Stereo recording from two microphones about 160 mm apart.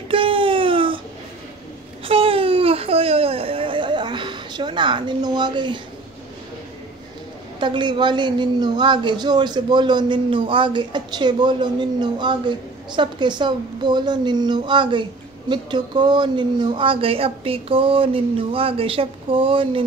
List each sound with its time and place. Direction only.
0.1 s a sound: 35° right (ahead or behind)
2.0 s baby cry: 35° right (ahead or behind)
7.6 s speech: 30° right (ahead or behind)